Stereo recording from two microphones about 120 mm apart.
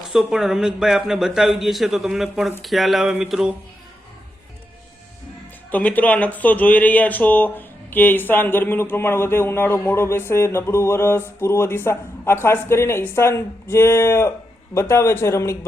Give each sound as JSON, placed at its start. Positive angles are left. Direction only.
{"t": 0.1, "sound": "a man's voice", "side_deg": -5}
{"t": 5.7, "sound": "speech", "side_deg": 10}